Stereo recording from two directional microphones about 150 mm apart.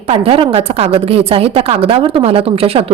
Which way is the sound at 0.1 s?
40° right (ahead or behind).